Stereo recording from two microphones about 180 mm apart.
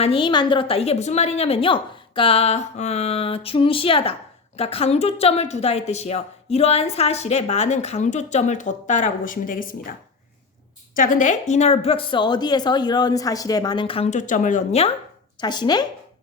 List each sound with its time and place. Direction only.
0.0 s a woman's voice: 30° left (ahead or behind); by 9.9 s 50° left (ahead or behind)
10.9 s a woman's voice: 45° left (ahead or behind)
15.4 s speech: 25° left (ahead or behind)